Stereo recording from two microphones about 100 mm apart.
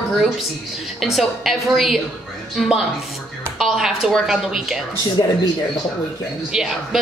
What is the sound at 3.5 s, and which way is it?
A woman's voice, 5° right (ahead or behind).